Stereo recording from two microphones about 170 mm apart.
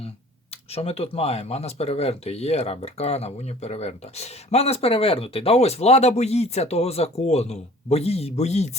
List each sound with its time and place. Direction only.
0.5 s speech: 35° left (ahead or behind)